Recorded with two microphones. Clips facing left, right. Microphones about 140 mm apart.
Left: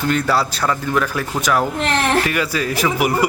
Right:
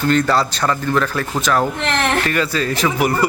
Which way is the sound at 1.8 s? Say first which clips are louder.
Left 1 dB; 35° left (ahead or behind).